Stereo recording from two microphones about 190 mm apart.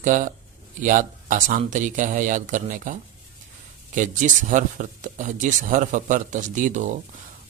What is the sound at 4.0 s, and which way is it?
A man's voice, 40° right (ahead or behind).